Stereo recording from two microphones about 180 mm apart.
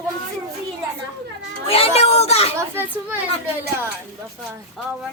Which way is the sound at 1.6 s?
30° left (ahead or behind).